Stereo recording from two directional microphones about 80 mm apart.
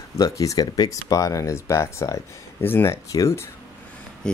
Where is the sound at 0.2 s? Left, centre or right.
Left.